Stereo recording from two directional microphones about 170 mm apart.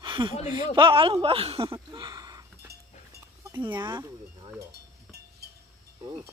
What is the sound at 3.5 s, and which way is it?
Speech, 25° right (ahead or behind).